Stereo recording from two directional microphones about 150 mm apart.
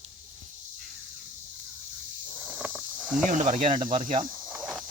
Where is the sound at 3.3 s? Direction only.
60° right (ahead or behind).